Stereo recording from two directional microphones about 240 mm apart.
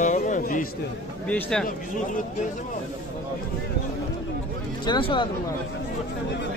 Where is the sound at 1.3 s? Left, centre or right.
Centre.